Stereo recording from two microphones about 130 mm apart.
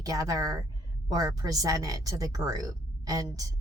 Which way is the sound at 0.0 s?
30° right (ahead or behind).